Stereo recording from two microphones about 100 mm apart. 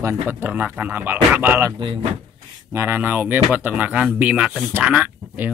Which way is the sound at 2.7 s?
25° right (ahead or behind).